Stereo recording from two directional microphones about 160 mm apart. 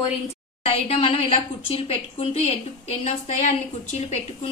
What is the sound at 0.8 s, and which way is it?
A woman's voice, 40° left (ahead or behind).